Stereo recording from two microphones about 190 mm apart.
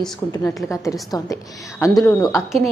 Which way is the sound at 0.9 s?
15° left (ahead or behind).